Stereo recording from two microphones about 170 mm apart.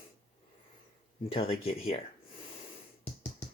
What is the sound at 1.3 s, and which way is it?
Speech, 35° left (ahead or behind).